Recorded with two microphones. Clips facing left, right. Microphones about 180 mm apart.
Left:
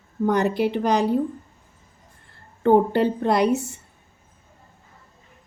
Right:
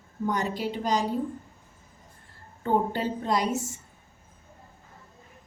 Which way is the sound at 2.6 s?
65° left (ahead or behind).